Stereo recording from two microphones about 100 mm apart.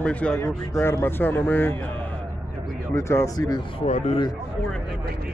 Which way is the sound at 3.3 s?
45° left (ahead or behind).